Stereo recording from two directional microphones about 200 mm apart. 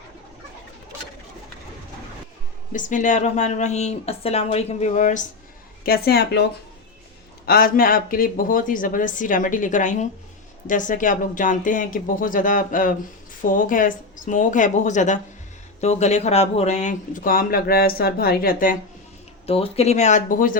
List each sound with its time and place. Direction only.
2.7 s speech: 40° left (ahead or behind)
5.8 s speech: 50° left (ahead or behind)
7.4 s speech: 50° left (ahead or behind)
19.5 s speech: 30° left (ahead or behind)